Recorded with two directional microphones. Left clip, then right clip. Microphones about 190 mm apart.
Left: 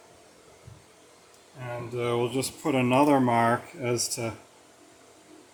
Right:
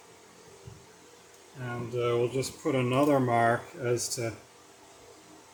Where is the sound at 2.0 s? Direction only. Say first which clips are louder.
Even; 45° left (ahead or behind).